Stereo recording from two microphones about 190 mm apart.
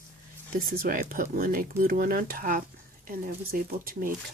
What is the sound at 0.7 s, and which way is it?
Speech, 50° right (ahead or behind).